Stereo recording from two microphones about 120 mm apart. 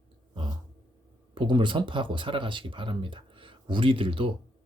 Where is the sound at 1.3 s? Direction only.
45° right (ahead or behind).